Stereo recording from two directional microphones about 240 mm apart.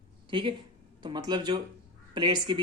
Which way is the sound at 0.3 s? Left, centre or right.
Right.